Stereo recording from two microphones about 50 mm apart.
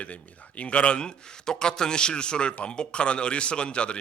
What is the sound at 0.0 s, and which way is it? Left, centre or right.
A man's voice, left.